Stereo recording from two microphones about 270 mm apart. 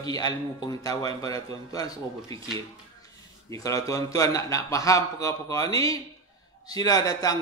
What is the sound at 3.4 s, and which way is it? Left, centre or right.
A man's voice, centre.